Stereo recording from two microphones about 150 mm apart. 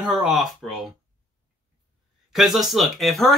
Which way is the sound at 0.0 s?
5° right (ahead or behind).